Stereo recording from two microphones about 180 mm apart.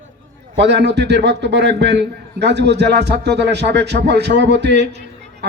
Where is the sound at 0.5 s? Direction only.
70° right (ahead or behind).